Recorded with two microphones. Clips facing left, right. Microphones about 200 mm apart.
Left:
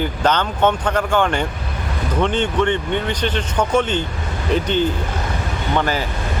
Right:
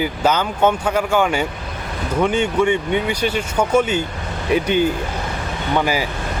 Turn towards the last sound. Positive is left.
turn(degrees=-10)  # may be behind; listen again after turning